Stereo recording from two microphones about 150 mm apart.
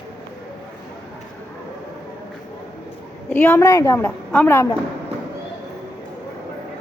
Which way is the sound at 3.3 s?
10° left (ahead or behind).